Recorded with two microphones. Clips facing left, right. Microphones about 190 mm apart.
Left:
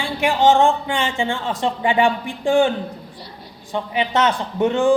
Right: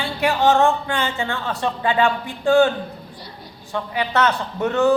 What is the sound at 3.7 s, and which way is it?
Speech, 20° left (ahead or behind).